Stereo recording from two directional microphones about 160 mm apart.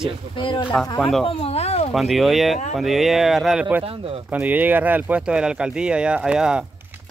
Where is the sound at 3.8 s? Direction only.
35° right (ahead or behind).